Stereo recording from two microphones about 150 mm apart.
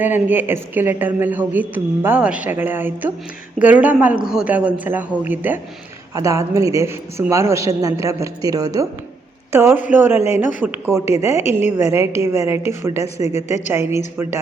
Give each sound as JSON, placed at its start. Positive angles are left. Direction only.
{"t": 0.0, "sound": "a woman's voice", "side_deg": -15}